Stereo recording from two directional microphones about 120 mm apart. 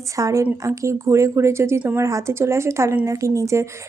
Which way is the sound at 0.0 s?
25° right (ahead or behind).